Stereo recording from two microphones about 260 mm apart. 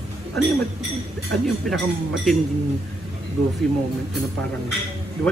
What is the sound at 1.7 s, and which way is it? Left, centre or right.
Speech, centre.